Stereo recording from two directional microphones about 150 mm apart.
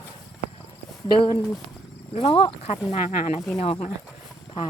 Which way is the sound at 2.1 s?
40° left (ahead or behind).